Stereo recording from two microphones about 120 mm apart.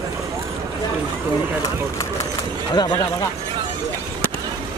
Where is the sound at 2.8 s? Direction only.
35° left (ahead or behind).